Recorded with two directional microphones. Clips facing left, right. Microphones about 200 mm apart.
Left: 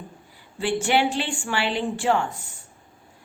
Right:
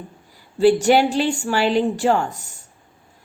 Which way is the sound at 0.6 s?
40° right (ahead or behind).